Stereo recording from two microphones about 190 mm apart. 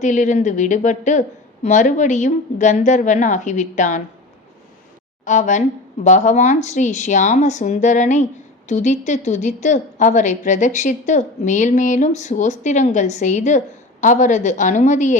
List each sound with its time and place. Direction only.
0.0 s speech: 40° left (ahead or behind)
5.2 s speech: 40° left (ahead or behind)